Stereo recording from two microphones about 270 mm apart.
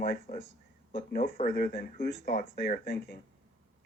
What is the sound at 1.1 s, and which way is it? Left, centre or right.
Speech, left.